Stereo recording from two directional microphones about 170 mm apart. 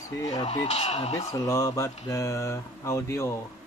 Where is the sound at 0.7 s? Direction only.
40° left (ahead or behind).